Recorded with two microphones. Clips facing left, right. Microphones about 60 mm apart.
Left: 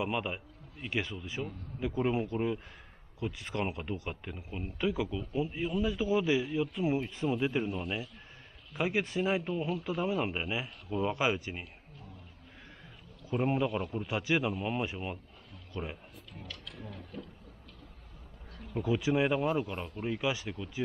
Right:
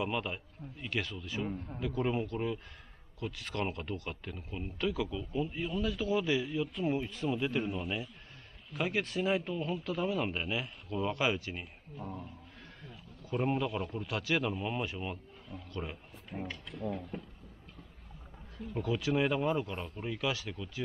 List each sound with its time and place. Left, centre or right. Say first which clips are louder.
0.0 s speech: left 1 dB; centre
1.5 s a man's voice: right 6 dB; right
1.8 s speech: left 3 dB; centre
7.6 s a man's voice: left 1 dB; centre
8.7 s speech: left 2 dB; centre
12.0 s speech: right 12 dB; right
13.3 s speech: left 2 dB; centre
14.5 s speech: left 2 dB; centre
16.4 s speech: right 7 dB; right
18.8 s speech: left 2 dB; centre